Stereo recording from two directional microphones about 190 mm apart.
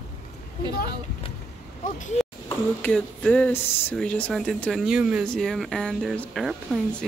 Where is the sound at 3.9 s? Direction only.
5° left (ahead or behind).